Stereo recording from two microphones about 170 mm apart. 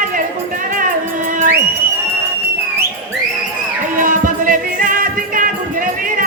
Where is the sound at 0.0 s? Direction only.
55° right (ahead or behind).